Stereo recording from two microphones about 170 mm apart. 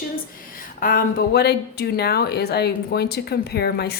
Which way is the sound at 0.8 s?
55° left (ahead or behind).